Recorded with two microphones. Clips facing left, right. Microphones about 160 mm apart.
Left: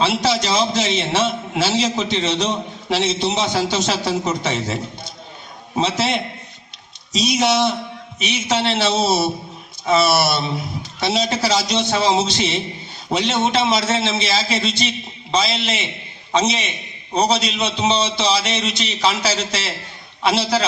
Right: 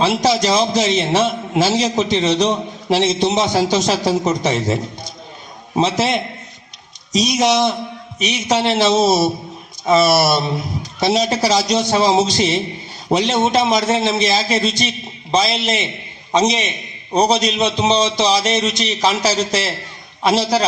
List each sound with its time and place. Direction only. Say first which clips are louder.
0.0 s a man's voice: right 3 dB; 40° right (ahead or behind)